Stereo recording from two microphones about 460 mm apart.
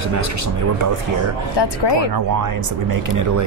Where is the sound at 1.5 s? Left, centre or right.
Left.